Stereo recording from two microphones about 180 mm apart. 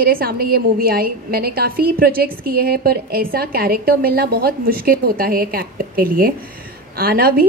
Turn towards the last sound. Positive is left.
turn(degrees=-55)  # may be behind; listen again after turning